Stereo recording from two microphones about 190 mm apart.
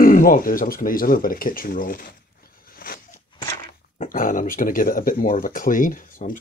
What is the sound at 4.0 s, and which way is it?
Speech, 45° left (ahead or behind).